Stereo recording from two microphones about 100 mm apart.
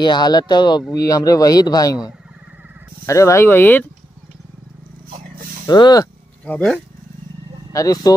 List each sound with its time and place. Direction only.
0.0 s speech: 45° left (ahead or behind); by 3.8 s 20° left (ahead or behind)
5.7 s speech: 45° left (ahead or behind)
6.4 s speech: 10° left (ahead or behind)
7.7 s speech: 35° left (ahead or behind)